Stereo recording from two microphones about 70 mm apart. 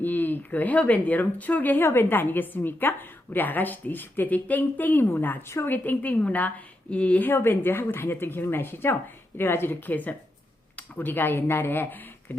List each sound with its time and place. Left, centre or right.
0.0 s speech: left
7.3 s speech: left